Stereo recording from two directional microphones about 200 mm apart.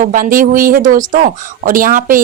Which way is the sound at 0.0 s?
40° right (ahead or behind).